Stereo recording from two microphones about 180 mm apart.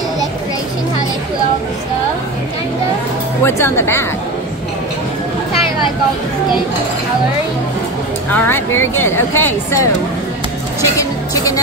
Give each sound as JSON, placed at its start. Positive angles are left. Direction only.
{"t": 3.4, "sound": "speech", "side_deg": 15}
{"t": 8.3, "sound": "speech", "side_deg": 10}